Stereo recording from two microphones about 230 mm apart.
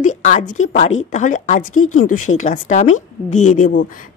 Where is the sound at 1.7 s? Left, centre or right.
Left.